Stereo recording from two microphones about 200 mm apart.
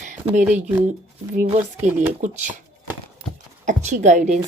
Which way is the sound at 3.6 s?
35° right (ahead or behind).